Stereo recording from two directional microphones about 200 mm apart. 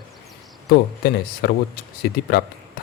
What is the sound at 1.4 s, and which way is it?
Speech, 55° left (ahead or behind).